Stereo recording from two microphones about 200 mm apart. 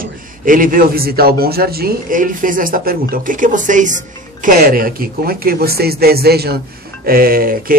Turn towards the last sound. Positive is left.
turn(degrees=-45)  # may be behind; listen again after turning